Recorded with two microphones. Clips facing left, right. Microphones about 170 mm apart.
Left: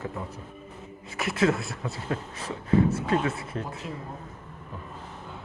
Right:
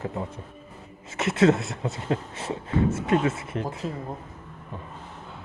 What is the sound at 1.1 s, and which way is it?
Speech, 25° right (ahead or behind).